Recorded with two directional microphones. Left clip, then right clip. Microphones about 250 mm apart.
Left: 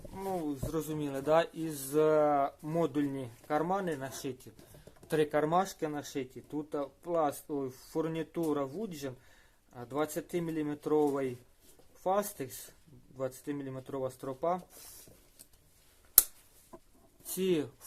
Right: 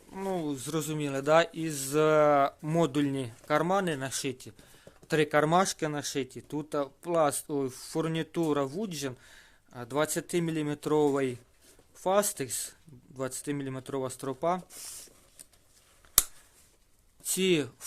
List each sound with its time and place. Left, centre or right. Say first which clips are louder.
0.2 s speech: right 3 dB; right
17.3 s speech: right 4 dB; right